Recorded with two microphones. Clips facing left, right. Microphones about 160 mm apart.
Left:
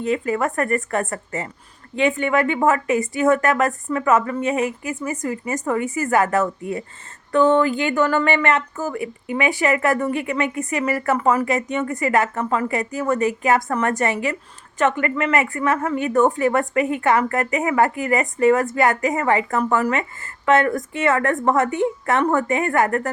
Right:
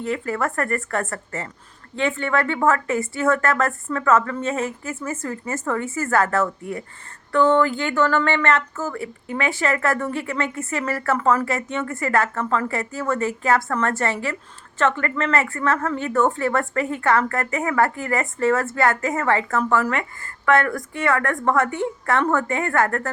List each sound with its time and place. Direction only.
0.0 s speech: 20° left (ahead or behind)